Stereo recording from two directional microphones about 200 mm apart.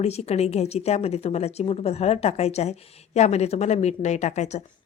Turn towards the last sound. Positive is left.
turn(degrees=35)  # may be behind; listen again after turning